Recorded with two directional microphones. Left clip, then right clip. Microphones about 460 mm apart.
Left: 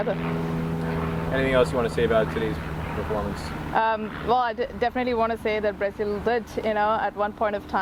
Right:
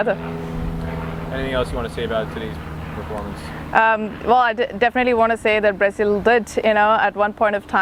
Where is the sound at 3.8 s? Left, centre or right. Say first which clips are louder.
Right 7 dB; right.